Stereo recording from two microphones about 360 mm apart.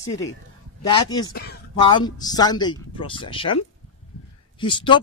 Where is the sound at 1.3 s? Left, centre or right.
Left.